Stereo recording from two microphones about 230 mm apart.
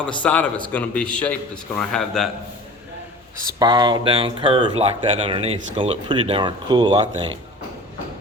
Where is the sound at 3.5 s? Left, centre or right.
Centre.